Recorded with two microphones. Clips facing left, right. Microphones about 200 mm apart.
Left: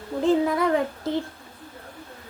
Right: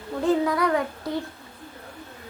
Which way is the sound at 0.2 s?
25° left (ahead or behind).